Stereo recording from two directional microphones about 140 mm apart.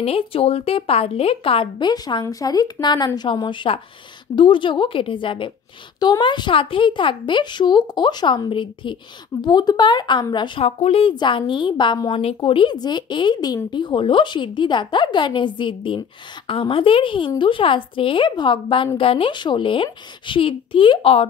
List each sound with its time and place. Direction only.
0.0 s speech: 45° left (ahead or behind)
10.6 s speech: 45° left (ahead or behind)